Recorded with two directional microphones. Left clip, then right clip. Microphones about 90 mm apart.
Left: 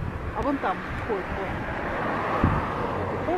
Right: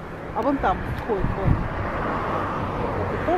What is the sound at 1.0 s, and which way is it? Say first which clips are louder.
Vehicle: right 4 dB; 45° left (ahead or behind).